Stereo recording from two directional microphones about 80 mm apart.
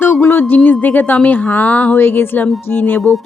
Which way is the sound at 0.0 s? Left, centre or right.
Left.